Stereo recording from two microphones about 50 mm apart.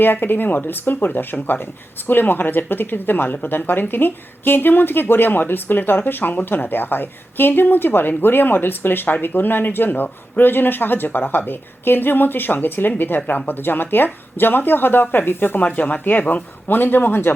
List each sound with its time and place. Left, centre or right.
0.0 s speech: left
15.6 s speech: left